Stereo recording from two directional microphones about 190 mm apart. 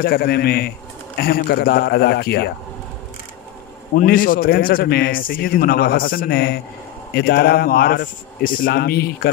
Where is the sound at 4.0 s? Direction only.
50° left (ahead or behind).